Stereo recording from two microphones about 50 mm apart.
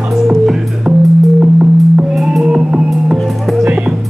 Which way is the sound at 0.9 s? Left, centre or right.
Centre.